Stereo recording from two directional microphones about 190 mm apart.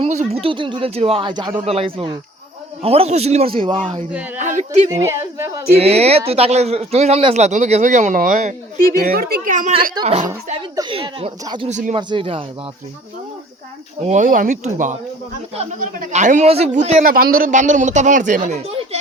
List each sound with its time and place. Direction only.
0.0 s a sound: 35° right (ahead or behind)
0.4 s speech: 25° right (ahead or behind)
4.4 s speech: 40° right (ahead or behind)
4.9 s a woman's voice: 15° right (ahead or behind)
5.8 s speech: 30° right (ahead or behind)
9.0 s speech: 55° right (ahead or behind)
9.9 s speech: 30° right (ahead or behind)
11.7 s speech: 40° right (ahead or behind)
11.9 s speech: 25° right (ahead or behind)
14.0 s speech: 40° right (ahead or behind)
17.1 s speech: 50° right (ahead or behind)